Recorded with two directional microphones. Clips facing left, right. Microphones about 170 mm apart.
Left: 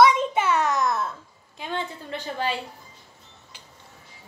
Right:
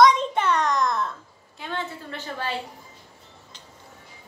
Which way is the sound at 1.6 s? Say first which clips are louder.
Left 1 dB; 15° left (ahead or behind).